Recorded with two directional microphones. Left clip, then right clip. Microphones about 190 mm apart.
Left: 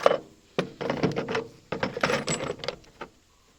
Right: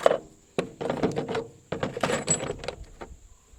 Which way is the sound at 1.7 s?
30° right (ahead or behind).